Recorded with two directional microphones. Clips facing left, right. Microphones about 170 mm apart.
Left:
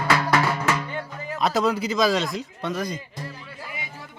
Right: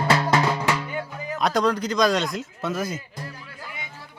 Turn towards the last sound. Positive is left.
turn(degrees=5)  # may be behind; listen again after turning